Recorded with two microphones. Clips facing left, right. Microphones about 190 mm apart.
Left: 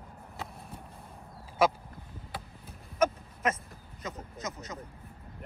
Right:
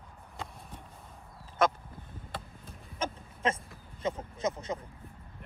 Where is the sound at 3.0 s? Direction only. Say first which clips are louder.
Left 4 dB; 30° right (ahead or behind).